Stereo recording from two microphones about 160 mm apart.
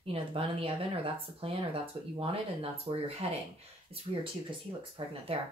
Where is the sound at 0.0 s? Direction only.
35° right (ahead or behind).